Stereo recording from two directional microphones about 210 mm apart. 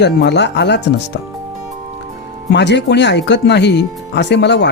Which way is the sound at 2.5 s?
55° left (ahead or behind).